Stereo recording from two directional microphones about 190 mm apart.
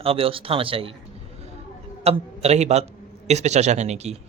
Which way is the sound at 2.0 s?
35° right (ahead or behind).